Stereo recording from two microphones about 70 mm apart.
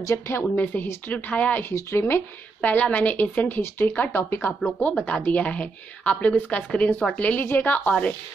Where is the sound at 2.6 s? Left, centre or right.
Left.